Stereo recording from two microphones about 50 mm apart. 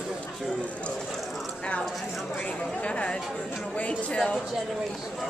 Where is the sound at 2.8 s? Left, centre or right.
Left.